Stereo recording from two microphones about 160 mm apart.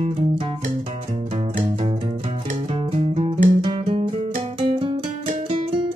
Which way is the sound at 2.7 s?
40° right (ahead or behind).